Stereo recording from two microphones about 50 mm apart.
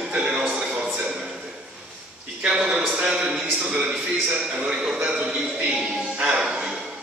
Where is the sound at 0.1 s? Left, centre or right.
Centre.